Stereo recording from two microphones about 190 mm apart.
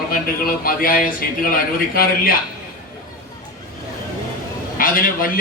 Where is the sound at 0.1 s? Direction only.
50° left (ahead or behind).